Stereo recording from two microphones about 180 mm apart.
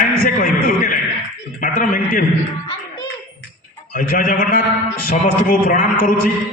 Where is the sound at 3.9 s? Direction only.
50° left (ahead or behind).